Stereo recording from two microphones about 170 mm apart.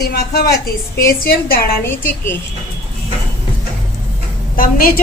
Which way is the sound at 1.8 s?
15° left (ahead or behind).